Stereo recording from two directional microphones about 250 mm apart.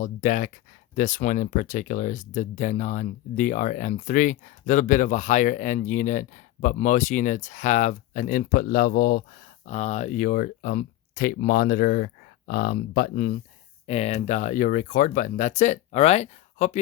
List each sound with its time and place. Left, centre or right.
0.0 s speech: left